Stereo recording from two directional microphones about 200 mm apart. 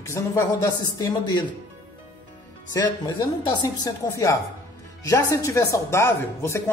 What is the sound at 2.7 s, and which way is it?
Speech, 20° left (ahead or behind).